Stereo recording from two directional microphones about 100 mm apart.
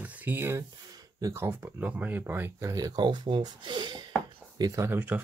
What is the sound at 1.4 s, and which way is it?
Speech, 25° right (ahead or behind).